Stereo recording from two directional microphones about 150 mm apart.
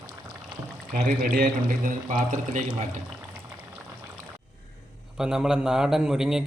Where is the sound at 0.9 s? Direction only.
75° right (ahead or behind).